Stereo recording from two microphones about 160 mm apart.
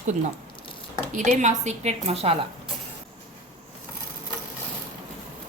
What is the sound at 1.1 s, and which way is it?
A woman's voice, 50° right (ahead or behind).